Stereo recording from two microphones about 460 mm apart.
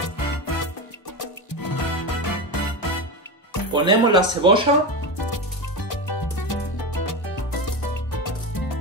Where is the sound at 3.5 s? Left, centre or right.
Left.